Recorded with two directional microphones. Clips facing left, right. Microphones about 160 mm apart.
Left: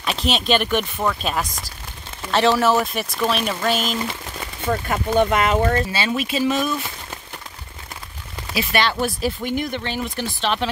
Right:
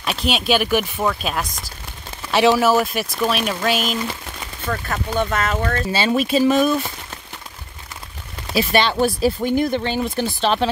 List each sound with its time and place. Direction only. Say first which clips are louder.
0.0 s speech: right 1 dB; centre (ahead or behind)
4.6 s speech: left 3 dB; 20° left (ahead or behind)
5.9 s speech: right 4 dB; 30° right (ahead or behind)
8.5 s speech: right 4 dB; 30° right (ahead or behind)